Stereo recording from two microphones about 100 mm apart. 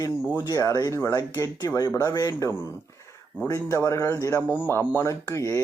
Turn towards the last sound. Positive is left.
turn(degrees=30)  # may be behind; listen again after turning